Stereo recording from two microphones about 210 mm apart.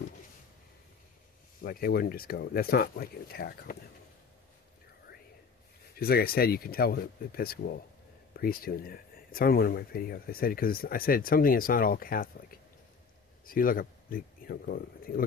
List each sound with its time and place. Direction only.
1.6 s speech: 45° left (ahead or behind)
6.0 s speech: 45° left (ahead or behind)